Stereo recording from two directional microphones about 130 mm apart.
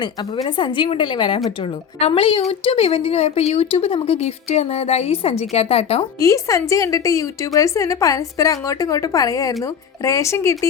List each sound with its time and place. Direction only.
0.4 s a woman's voice: 40° left (ahead or behind)
6.1 s a woman's voice: 25° left (ahead or behind)